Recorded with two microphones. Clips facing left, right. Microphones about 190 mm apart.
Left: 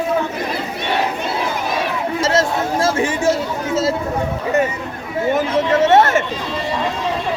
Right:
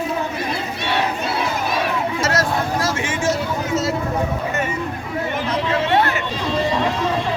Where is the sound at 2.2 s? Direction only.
25° left (ahead or behind).